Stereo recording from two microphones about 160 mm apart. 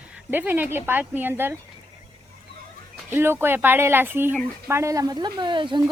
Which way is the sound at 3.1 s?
15° right (ahead or behind).